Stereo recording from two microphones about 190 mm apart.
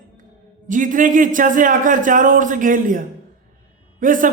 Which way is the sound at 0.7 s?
45° right (ahead or behind).